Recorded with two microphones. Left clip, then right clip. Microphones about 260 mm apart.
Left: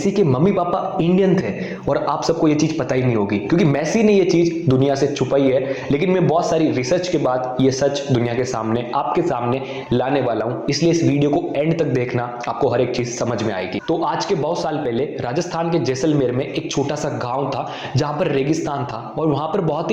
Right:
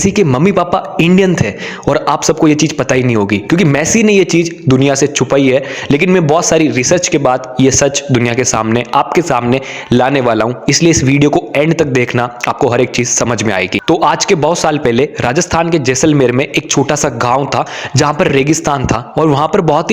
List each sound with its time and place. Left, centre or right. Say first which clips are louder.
0.0 s a man's voice: right 6 dB; right